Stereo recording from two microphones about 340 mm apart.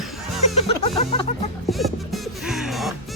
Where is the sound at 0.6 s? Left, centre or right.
Centre.